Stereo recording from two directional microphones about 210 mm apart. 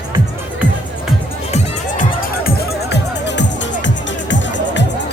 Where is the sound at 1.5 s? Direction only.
40° left (ahead or behind).